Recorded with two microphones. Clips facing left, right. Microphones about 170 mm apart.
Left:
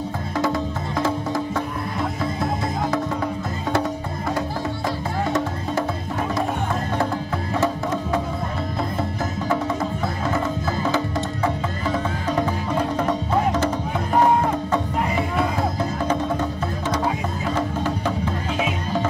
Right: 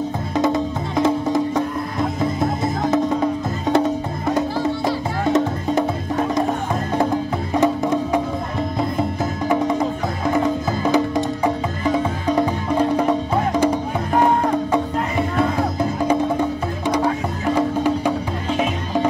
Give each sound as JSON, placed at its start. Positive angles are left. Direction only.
{"t": 1.0, "sound": "music", "side_deg": -20}
{"t": 3.7, "sound": "music", "side_deg": -20}
{"t": 7.6, "sound": "music", "side_deg": -15}
{"t": 9.2, "sound": "music", "side_deg": -15}
{"t": 16.1, "sound": "music", "side_deg": -15}